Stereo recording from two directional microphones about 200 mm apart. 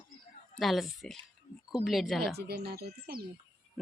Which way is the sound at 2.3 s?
55° right (ahead or behind).